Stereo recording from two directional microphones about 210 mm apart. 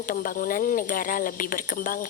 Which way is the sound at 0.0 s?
40° left (ahead or behind).